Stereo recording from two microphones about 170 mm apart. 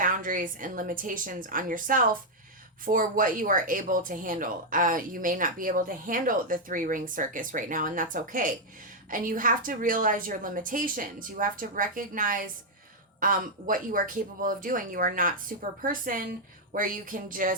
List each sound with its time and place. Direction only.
0.0 s speech: 55° right (ahead or behind)